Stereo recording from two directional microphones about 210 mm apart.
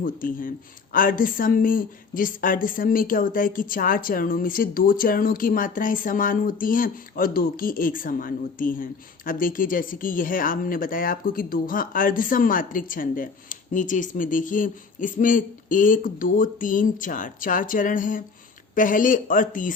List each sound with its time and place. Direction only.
0.0 s a woman's voice: 40° left (ahead or behind)